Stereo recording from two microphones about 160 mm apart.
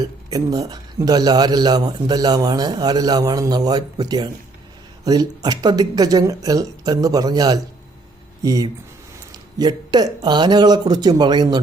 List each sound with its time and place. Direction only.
0.0 s a man's voice: 25° right (ahead or behind)